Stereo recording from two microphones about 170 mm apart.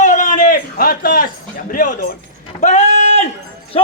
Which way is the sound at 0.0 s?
50° left (ahead or behind).